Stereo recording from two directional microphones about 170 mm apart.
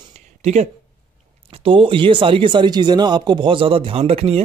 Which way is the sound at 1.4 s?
30° right (ahead or behind).